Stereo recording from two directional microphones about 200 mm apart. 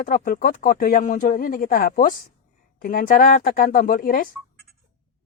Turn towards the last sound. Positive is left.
turn(degrees=45)  # may be behind; listen again after turning